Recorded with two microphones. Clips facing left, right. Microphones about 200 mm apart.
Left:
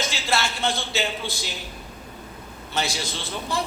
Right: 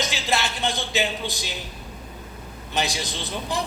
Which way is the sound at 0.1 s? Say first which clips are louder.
Even; 15° right (ahead or behind).